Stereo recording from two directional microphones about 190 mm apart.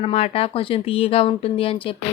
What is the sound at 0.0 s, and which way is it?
A woman's voice, 30° left (ahead or behind).